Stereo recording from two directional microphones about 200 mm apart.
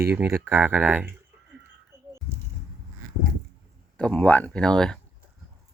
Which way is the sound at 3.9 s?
5° left (ahead or behind).